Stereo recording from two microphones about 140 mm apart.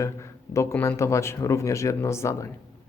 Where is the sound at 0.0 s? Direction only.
20° left (ahead or behind).